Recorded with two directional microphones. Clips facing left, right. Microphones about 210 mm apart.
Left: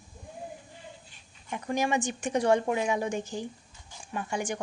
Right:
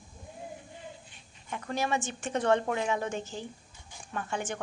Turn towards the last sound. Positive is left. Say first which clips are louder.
# left 2 dB
turn(degrees=10)  # may be behind; listen again after turning